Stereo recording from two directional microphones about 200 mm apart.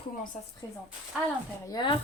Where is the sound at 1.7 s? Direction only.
25° left (ahead or behind).